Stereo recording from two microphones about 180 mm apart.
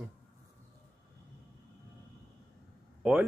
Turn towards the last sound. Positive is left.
turn(degrees=-5)  # may be behind; listen again after turning